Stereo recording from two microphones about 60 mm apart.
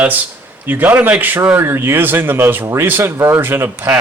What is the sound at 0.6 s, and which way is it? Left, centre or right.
Speech, right.